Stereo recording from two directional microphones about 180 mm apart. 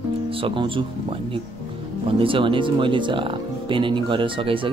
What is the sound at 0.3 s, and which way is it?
Speech, 30° right (ahead or behind).